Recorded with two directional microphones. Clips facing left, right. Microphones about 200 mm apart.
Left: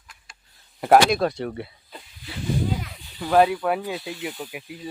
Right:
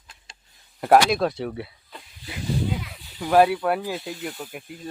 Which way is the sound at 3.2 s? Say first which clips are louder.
Right 1 dB; 5° right (ahead or behind).